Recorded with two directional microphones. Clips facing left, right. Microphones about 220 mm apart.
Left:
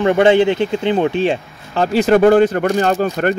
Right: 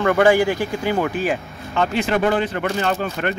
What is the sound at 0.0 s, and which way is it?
Speech, 25° left (ahead or behind).